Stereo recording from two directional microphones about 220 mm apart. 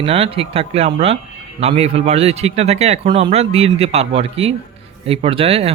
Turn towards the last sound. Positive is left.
turn(degrees=-25)  # may be behind; listen again after turning